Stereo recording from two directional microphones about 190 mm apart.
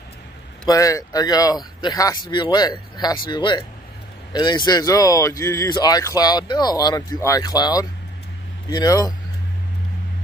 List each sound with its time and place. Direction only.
0.7 s speech: 15° left (ahead or behind)